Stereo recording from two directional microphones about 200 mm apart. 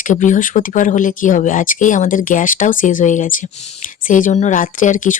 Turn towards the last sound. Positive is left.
turn(degrees=40)  # may be behind; listen again after turning